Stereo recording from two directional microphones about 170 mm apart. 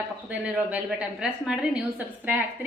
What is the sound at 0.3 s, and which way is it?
A woman's voice, 5° right (ahead or behind).